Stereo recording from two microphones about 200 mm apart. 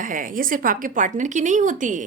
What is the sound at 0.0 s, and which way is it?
A woman's voice, 40° right (ahead or behind).